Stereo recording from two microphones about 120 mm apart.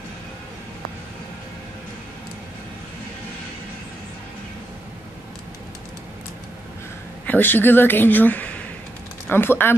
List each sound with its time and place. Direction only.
7.2 s speech: 15° left (ahead or behind)